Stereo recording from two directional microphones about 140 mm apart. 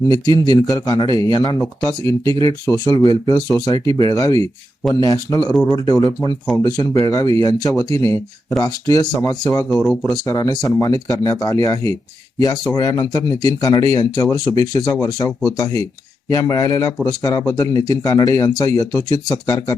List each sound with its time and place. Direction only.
0.1 s speech: 30° left (ahead or behind)
5.5 s speech: 5° left (ahead or behind)
5.7 s speech: 25° left (ahead or behind)
9.6 s speech: centre (ahead or behind)
10.2 s speech: 25° left (ahead or behind)